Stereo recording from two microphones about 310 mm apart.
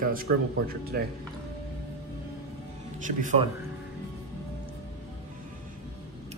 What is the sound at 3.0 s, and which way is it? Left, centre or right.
Speech, right.